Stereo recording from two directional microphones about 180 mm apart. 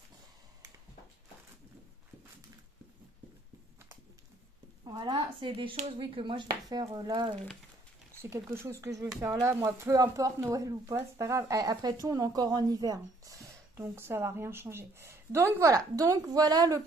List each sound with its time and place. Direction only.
4.8 s speech: 25° right (ahead or behind)
8.5 s speech: 15° right (ahead or behind)